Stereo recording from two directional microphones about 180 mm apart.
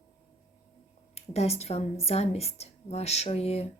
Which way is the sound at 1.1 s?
35° left (ahead or behind).